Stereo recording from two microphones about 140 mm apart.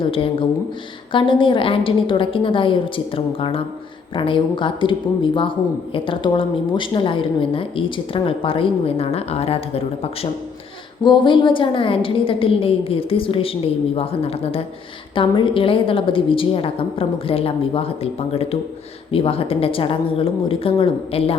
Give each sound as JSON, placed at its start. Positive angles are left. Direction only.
{"t": 0.0, "sound": "a woman's voice", "side_deg": 40}
{"t": 11.0, "sound": "a woman's voice", "side_deg": 35}